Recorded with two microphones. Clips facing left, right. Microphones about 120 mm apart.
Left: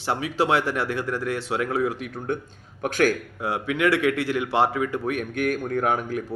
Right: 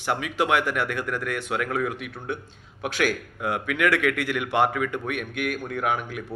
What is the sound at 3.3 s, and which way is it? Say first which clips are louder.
Speech: left 1 dB; 30° left (ahead or behind).